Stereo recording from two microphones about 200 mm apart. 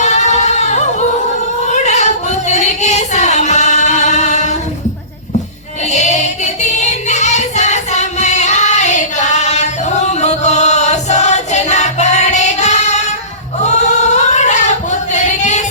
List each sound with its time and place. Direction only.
0.0 s singing: 35° left (ahead or behind)
1.6 s a sound: 35° left (ahead or behind)
5.9 s singing: 35° left (ahead or behind)
13.6 s female singing: 35° left (ahead or behind)